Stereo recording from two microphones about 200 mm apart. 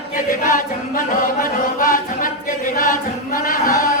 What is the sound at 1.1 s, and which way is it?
Music, 45° left (ahead or behind).